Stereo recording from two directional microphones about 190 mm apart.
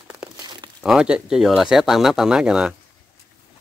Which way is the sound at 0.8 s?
5° right (ahead or behind).